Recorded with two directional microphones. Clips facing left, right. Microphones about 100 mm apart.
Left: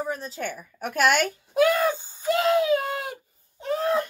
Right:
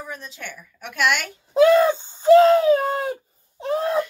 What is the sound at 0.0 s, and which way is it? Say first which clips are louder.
A woman's voice: left 5 dB; 35° left (ahead or behind).